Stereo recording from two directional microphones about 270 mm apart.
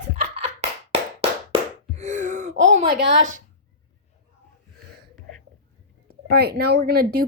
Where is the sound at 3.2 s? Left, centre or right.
Right.